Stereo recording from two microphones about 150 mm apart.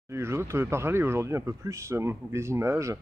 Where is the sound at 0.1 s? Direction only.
20° right (ahead or behind).